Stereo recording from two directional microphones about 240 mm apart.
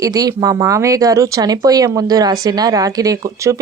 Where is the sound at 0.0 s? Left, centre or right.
Centre.